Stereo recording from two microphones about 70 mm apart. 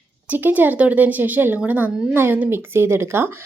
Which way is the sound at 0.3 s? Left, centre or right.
Right.